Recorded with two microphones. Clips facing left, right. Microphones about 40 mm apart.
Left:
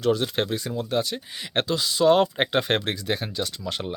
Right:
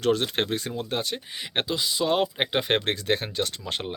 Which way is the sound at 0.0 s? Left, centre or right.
Right.